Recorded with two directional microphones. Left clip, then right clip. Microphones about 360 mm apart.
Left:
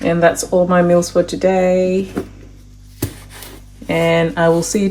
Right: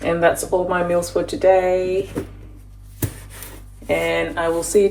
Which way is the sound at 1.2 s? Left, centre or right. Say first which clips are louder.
Left 1 dB; left.